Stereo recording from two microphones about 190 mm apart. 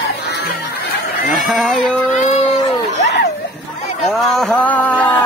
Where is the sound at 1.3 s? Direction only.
Centre (ahead or behind).